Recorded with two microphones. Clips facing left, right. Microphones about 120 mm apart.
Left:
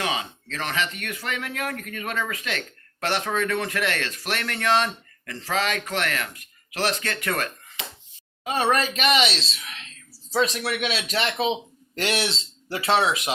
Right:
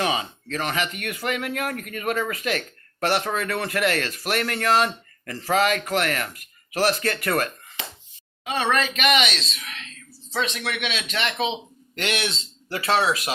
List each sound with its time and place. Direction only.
0.6 s speech: 10° right (ahead or behind)
8.4 s speech: 40° left (ahead or behind); by 13.3 s 20° left (ahead or behind)